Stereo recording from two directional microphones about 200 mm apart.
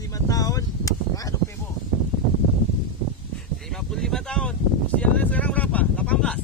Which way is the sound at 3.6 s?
Centre (ahead or behind).